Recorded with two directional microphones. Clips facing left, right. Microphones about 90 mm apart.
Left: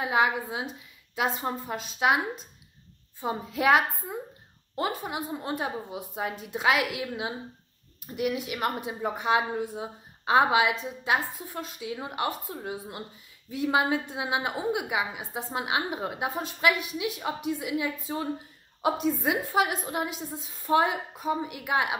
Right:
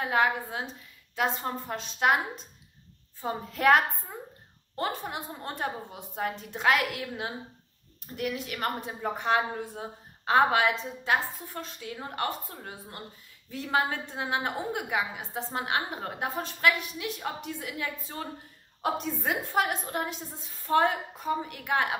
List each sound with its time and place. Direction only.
0.0 s a woman's voice: 10° left (ahead or behind)